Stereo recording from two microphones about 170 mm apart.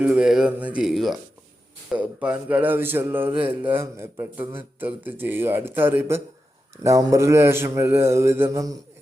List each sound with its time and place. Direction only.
0.0 s speech: 5° right (ahead or behind)